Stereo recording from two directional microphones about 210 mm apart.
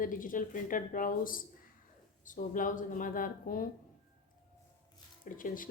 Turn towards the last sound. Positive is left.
turn(degrees=40)  # may be behind; listen again after turning